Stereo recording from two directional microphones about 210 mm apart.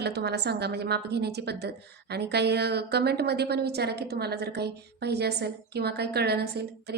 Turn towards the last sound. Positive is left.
turn(degrees=-50)  # may be behind; listen again after turning